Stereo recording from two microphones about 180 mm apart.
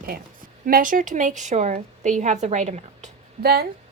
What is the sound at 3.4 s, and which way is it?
Speech, 60° right (ahead or behind).